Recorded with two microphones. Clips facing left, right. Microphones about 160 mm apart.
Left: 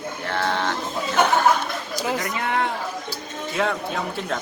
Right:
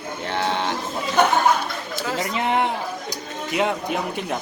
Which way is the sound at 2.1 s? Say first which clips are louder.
Right 6 dB; 20° right (ahead or behind).